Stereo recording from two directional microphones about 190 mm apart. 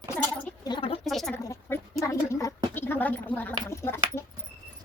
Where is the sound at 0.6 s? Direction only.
25° left (ahead or behind).